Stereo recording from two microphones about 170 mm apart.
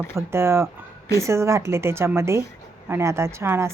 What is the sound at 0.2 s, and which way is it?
A woman's voice, 15° right (ahead or behind).